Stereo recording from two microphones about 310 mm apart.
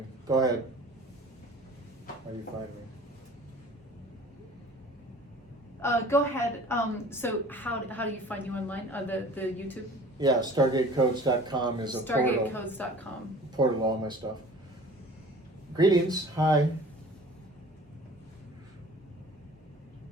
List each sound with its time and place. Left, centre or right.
0.3 s speech: centre
5.8 s a woman's voice: centre
10.2 s speech: centre
12.0 s a woman's voice: centre
13.6 s speech: centre
15.7 s speech: centre